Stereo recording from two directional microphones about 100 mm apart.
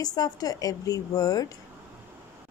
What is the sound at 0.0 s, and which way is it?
A woman's voice, 40° left (ahead or behind).